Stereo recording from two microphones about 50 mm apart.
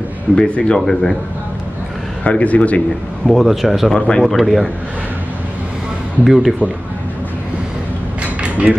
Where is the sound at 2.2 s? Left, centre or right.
Left.